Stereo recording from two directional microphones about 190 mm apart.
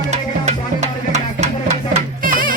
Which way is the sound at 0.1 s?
35° right (ahead or behind).